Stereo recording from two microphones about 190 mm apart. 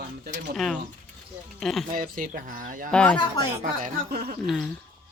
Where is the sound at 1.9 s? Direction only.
45° right (ahead or behind).